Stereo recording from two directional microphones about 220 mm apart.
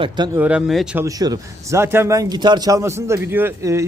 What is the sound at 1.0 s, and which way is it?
Speech, 15° right (ahead or behind).